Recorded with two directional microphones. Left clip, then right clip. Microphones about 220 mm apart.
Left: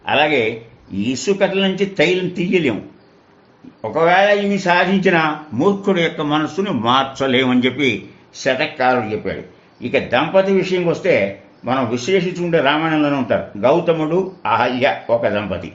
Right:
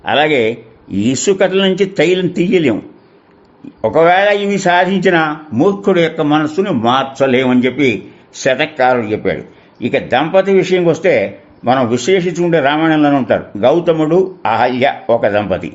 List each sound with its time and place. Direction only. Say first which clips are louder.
0.0 s speech: right 3 dB; 50° right (ahead or behind)
3.8 s speech: right 4 dB; 55° right (ahead or behind); by 7.9 s 30° right (ahead or behind)
8.4 s speech: right 5 dB; 45° right (ahead or behind)